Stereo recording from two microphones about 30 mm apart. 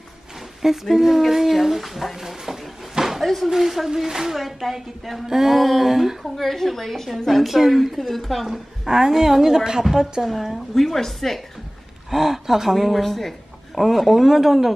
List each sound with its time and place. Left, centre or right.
0.6 s speech: centre
2.9 s a sound: centre
3.4 s speech: centre
4.4 s speech: centre
5.3 s speech: centre
6.2 s a woman's voice: centre
8.5 s a woman's voice: centre
10.2 s speech: centre
10.7 s a woman's voice: centre
12.1 s speech: centre
12.7 s speech: centre